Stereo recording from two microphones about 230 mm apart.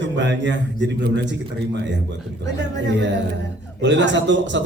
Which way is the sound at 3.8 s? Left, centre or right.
Right.